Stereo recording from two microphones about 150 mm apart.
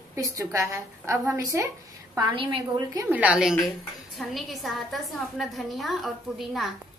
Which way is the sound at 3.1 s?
10° right (ahead or behind).